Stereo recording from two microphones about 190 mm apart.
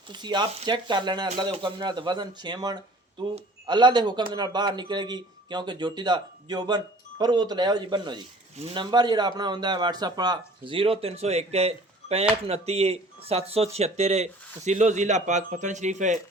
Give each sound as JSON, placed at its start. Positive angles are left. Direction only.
{"t": 0.1, "sound": "a man's voice", "side_deg": -25}